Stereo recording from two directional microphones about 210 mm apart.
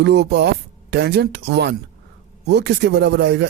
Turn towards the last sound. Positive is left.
turn(degrees=-55)  # may be behind; listen again after turning